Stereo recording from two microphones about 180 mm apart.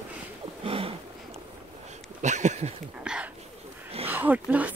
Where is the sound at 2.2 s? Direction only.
40° right (ahead or behind).